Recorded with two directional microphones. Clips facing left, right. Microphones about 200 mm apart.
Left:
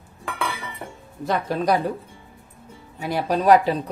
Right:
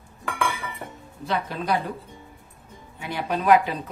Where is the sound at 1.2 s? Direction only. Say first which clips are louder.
Left 5 dB; 45° left (ahead or behind).